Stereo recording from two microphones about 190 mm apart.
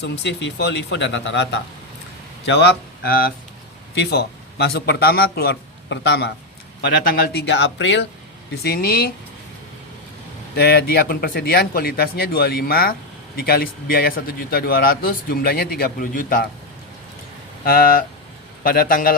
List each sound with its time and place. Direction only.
0.0 s a man's voice: 65° left (ahead or behind)
8.6 s a man's voice: 55° left (ahead or behind)
10.5 s a man's voice: 55° left (ahead or behind)
17.7 s a man's voice: 50° left (ahead or behind)